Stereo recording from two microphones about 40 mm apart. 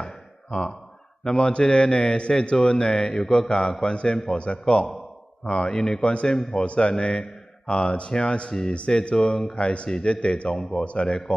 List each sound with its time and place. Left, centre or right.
0.0 s a sound: left
1.2 s speech: left
9.6 s speech: left
10.8 s speech: left